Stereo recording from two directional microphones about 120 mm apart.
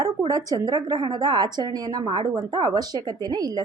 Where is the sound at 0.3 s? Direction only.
30° right (ahead or behind).